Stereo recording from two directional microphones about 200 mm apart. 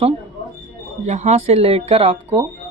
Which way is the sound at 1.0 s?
35° right (ahead or behind).